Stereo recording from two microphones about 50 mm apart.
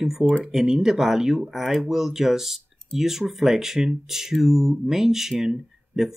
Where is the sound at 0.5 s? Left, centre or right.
Centre.